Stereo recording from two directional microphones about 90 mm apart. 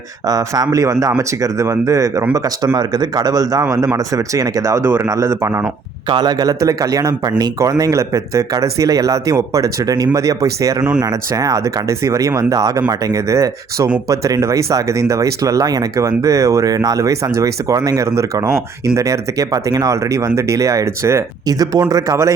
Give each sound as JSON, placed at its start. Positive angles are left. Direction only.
{"t": 0.3, "sound": "a man's voice", "side_deg": -40}
{"t": 5.0, "sound": "speech", "side_deg": -40}
{"t": 6.1, "sound": "a man's voice", "side_deg": -55}